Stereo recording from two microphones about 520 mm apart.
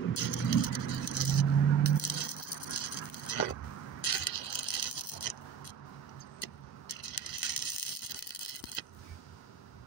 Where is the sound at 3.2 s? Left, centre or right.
Left.